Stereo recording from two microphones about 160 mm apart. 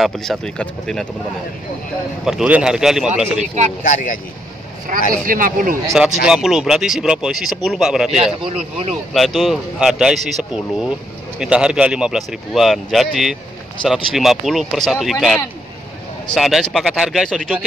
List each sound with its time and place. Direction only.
0.0 s speech: centre (ahead or behind)
2.2 s speech: 5° right (ahead or behind)
3.3 s speech: 45° right (ahead or behind)
3.8 s speech: 55° left (ahead or behind)
4.9 s speech: 55° right (ahead or behind)
5.9 s speech: 5° right (ahead or behind)